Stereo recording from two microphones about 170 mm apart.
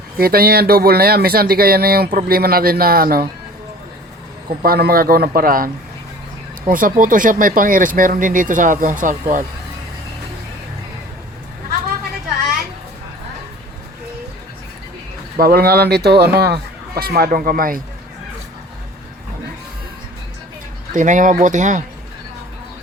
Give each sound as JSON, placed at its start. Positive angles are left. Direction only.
{"t": 0.2, "sound": "speech", "side_deg": -60}
{"t": 4.6, "sound": "speech", "side_deg": -60}
{"t": 15.4, "sound": "speech", "side_deg": -60}
{"t": 20.9, "sound": "speech", "side_deg": -50}